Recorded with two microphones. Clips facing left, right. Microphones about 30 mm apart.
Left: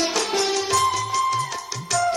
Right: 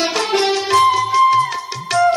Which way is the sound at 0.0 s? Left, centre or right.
Right.